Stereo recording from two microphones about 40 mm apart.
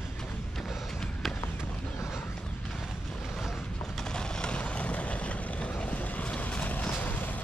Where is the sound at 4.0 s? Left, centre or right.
Left.